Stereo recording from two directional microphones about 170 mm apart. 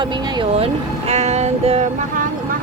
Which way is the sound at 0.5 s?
35° right (ahead or behind).